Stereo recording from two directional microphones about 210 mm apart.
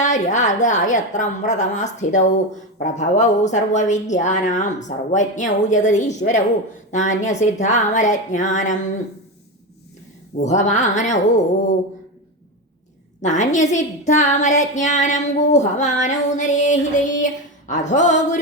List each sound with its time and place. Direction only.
0.0 s speech: 35° left (ahead or behind)
10.4 s speech: 35° left (ahead or behind)
13.2 s speech: 35° left (ahead or behind)